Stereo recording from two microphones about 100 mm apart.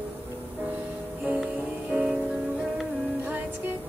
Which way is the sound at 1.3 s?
15° right (ahead or behind).